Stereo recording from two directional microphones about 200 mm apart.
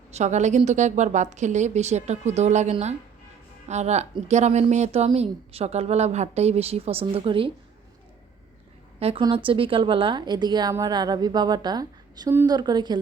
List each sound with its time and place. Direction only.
0.1 s a woman's voice: 35° right (ahead or behind)
9.0 s a woman's voice: 30° right (ahead or behind)